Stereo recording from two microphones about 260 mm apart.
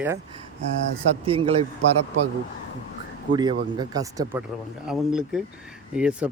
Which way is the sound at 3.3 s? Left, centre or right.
Centre.